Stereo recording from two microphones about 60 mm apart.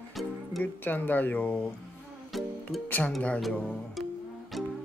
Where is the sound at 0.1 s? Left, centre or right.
Centre.